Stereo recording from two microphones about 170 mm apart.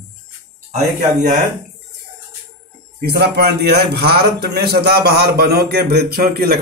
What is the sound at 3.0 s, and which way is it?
A man's voice, 70° right (ahead or behind).